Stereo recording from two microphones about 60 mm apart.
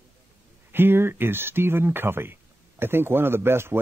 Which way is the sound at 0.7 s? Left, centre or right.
Right.